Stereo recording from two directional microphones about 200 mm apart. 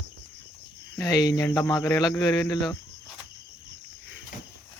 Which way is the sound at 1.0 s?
15° left (ahead or behind).